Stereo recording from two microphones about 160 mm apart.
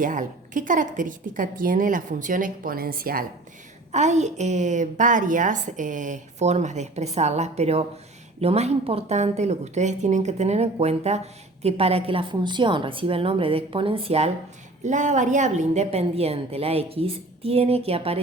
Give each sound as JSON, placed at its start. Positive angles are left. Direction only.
{"t": 0.0, "sound": "a woman's voice", "side_deg": -55}
{"t": 3.9, "sound": "a woman's voice", "side_deg": -45}
{"t": 14.8, "sound": "a woman's voice", "side_deg": -50}